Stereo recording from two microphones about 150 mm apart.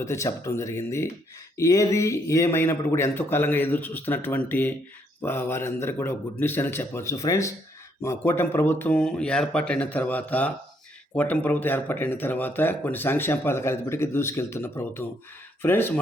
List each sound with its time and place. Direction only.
0.0 s speech: 20° left (ahead or behind)